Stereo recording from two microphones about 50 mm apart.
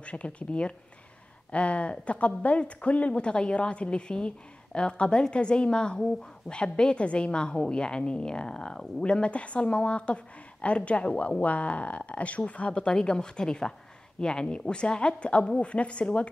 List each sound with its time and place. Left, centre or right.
0.0 s a woman's voice: left